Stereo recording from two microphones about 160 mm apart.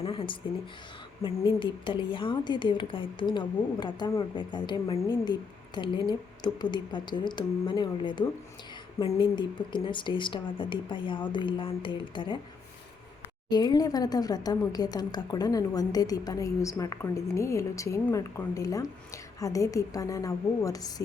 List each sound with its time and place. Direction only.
0.0 s speech: 35° left (ahead or behind)
13.5 s speech: 25° left (ahead or behind)